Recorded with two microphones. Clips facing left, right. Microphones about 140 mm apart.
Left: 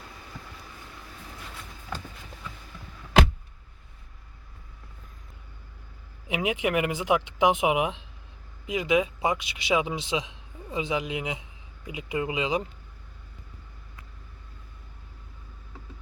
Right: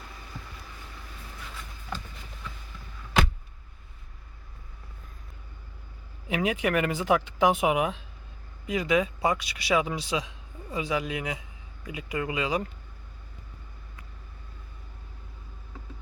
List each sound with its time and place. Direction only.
6.2 s speech: 15° left (ahead or behind)